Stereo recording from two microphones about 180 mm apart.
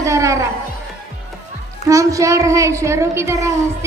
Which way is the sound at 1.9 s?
15° right (ahead or behind).